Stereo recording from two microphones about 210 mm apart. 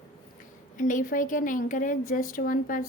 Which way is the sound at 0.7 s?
40° left (ahead or behind).